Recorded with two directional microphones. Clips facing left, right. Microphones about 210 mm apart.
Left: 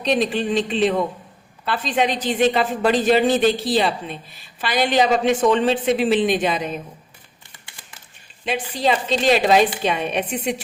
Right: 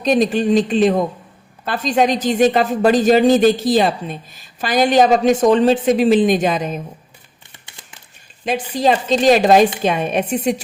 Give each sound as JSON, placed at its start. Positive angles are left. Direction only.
{"t": 0.0, "sound": "a woman's voice", "side_deg": -45}
{"t": 8.4, "sound": "a woman's voice", "side_deg": -45}